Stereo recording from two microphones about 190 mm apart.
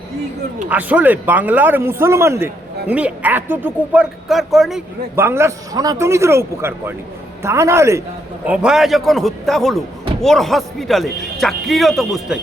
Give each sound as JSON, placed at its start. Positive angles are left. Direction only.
{"t": 0.7, "sound": "speech", "side_deg": -10}
{"t": 5.1, "sound": "speech", "side_deg": -15}
{"t": 8.4, "sound": "speech", "side_deg": -5}